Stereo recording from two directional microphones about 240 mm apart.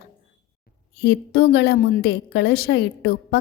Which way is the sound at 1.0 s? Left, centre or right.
Left.